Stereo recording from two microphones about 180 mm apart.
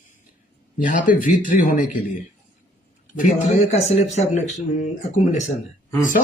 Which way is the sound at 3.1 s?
40° left (ahead or behind).